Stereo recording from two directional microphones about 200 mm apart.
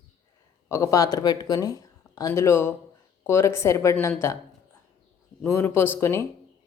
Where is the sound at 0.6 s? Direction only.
15° left (ahead or behind).